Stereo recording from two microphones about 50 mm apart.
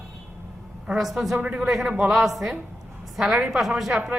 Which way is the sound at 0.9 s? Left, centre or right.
Centre.